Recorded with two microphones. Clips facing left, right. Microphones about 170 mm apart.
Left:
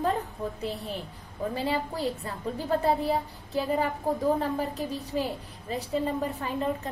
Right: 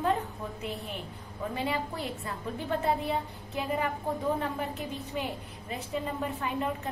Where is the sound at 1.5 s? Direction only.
35° left (ahead or behind).